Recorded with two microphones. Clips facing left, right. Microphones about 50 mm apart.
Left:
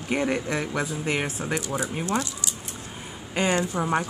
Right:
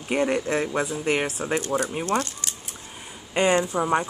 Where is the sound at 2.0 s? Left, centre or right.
Right.